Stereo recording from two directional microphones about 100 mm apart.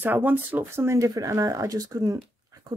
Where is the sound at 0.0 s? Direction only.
20° right (ahead or behind).